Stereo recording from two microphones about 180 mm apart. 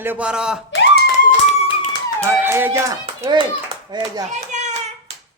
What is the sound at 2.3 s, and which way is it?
Speech, 15° right (ahead or behind).